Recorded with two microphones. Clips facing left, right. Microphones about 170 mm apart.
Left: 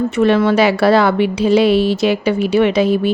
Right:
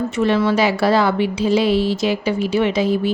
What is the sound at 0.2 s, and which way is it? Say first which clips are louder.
Speech: left 4 dB; 60° left (ahead or behind).